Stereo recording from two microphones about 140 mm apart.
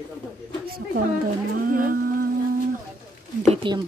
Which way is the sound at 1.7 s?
90° right.